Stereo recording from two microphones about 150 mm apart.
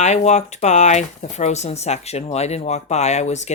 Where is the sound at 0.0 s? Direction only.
50° left (ahead or behind).